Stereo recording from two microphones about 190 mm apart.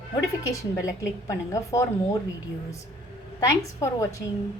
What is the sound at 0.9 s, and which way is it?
A woman's voice, 15° left (ahead or behind).